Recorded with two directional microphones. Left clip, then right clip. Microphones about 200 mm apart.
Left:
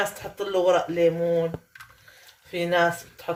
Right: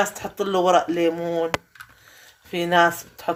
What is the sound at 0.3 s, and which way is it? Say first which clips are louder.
Speech: right 3 dB; 50° right (ahead or behind).